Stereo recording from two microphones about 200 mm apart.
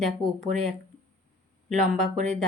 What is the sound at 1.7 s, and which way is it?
Speech, 35° right (ahead or behind).